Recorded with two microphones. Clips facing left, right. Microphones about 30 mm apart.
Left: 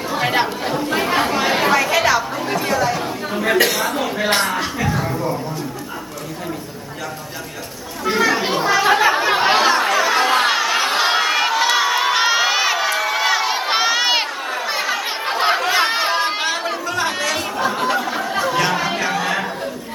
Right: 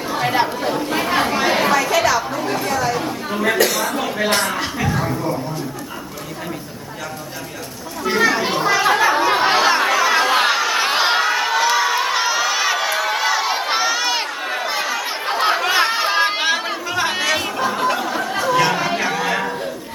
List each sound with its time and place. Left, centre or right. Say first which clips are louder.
0.1 s chatter: even; centre
1.7 s speech: left 1 dB; centre
3.6 s a man's voice: even; left
3.9 s speech: even; centre
4.4 s speech: left 1 dB; centre
4.6 s speech: even; centre
8.0 s a sound: even; centre
10.8 s chatter: even; centre
11.9 s crowd: left 1 dB; centre
12.2 s crowd: left 2 dB; centre
12.6 s run: even; centre; by 14.3 s left
14.7 s chatter: left 1 dB; centre
16.1 s music: right 2 dB; centre
17.6 s chatter: even; centre